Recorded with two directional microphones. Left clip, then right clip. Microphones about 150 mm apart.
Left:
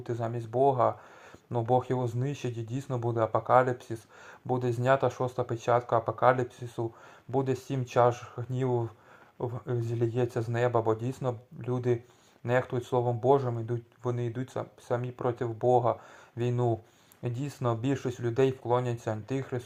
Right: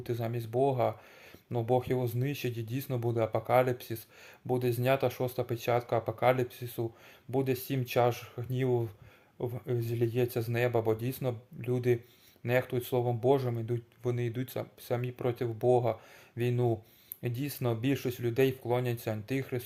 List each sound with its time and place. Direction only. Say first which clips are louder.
0.0 s speech: left 2 dB; 10° right (ahead or behind)